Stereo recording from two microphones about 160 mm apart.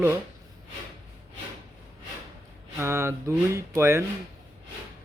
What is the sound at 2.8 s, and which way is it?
Speech, 15° right (ahead or behind).